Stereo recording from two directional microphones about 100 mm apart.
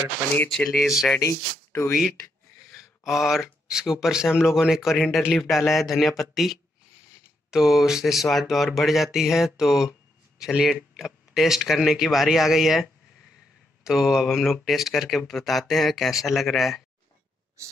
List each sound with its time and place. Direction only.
0.5 s speech: centre (ahead or behind)
1.2 s speech: 25° left (ahead or behind)
2.7 s speech: centre (ahead or behind)
13.8 s speech: 5° right (ahead or behind)